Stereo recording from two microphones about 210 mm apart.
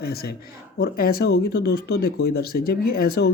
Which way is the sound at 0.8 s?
45° left (ahead or behind).